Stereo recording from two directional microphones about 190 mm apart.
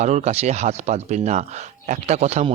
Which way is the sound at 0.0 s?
35° right (ahead or behind).